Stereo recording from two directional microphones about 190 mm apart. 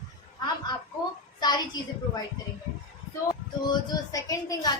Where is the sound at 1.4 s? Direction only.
20° left (ahead or behind).